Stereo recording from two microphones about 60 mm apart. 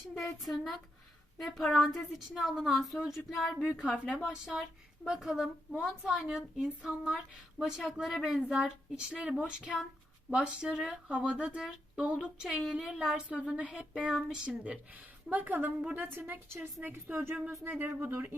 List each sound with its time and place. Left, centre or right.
0.1 s a woman's voice: centre; by 18.2 s right